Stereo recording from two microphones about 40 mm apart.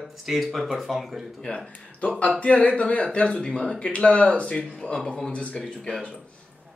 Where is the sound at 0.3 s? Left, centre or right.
Centre.